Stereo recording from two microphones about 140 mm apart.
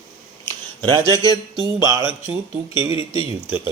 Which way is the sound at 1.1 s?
25° left (ahead or behind).